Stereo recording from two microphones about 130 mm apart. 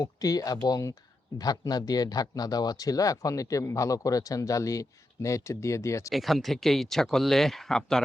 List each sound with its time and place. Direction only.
0.0 s speech: 30° left (ahead or behind)
6.1 s speech: centre (ahead or behind)